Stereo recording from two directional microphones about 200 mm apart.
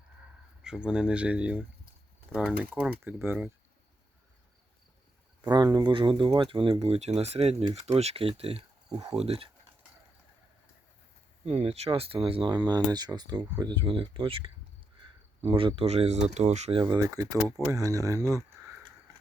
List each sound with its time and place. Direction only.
0.6 s speech: 5° right (ahead or behind)
5.4 s speech: 20° right (ahead or behind)
11.4 s speech: 30° right (ahead or behind); by 18.9 s 15° right (ahead or behind)